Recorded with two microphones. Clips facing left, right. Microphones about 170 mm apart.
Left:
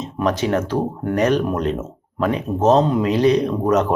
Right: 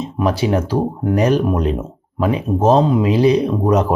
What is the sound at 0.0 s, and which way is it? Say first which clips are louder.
Speech: right 2 dB; 10° right (ahead or behind).